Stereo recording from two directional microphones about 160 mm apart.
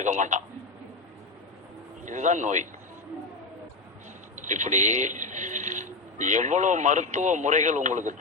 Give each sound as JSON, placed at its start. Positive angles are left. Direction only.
{"t": 0.0, "sound": "a man's voice", "side_deg": -50}
{"t": 2.0, "sound": "a man's voice", "side_deg": -50}
{"t": 4.4, "sound": "speech", "side_deg": -50}